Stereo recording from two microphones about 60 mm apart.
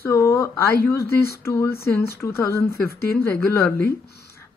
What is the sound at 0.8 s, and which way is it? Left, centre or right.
A woman's voice, left.